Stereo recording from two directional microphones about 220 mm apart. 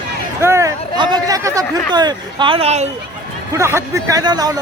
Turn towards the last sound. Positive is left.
turn(degrees=-20)  # may be behind; listen again after turning